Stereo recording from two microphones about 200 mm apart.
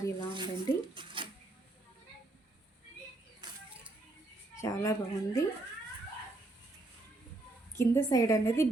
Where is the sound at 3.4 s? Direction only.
20° right (ahead or behind).